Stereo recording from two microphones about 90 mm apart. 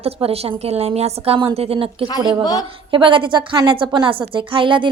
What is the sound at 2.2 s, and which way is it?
Speech, 55° right (ahead or behind).